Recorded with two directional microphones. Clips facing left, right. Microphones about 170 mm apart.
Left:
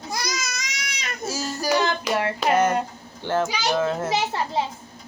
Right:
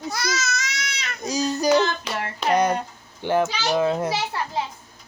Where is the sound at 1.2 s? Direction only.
15° right (ahead or behind).